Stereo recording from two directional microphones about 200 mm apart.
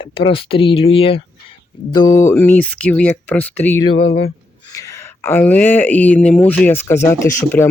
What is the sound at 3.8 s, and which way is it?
Speech, 30° left (ahead or behind).